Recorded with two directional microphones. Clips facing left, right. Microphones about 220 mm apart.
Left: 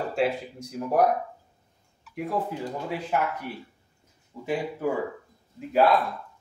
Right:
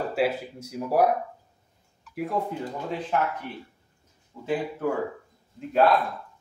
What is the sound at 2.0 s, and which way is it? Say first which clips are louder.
Speech: right 1 dB; centre (ahead or behind).